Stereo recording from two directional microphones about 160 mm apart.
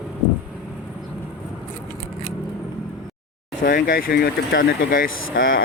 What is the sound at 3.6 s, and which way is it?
Speech, 60° left (ahead or behind).